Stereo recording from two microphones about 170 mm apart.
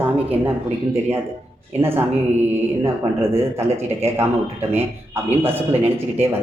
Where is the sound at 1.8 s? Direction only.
15° right (ahead or behind).